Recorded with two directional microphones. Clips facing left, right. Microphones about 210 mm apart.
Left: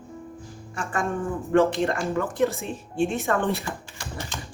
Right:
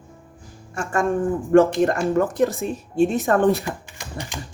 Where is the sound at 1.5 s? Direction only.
45° right (ahead or behind).